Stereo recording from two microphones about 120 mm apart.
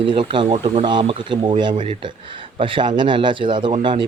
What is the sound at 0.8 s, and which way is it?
Speech, 40° right (ahead or behind).